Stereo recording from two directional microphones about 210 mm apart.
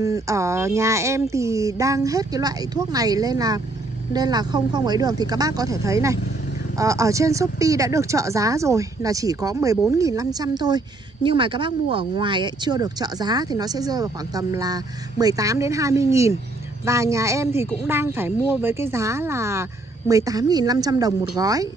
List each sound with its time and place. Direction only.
0.0 s speech: 15° right (ahead or behind)